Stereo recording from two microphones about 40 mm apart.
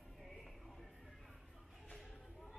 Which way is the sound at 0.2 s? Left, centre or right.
Centre.